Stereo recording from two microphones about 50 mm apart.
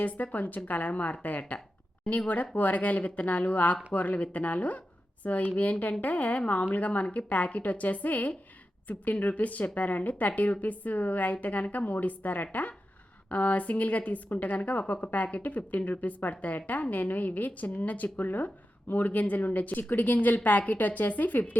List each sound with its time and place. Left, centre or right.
0.0 s a woman's voice: left